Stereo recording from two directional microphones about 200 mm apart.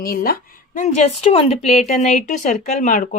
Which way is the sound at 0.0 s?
45° left (ahead or behind).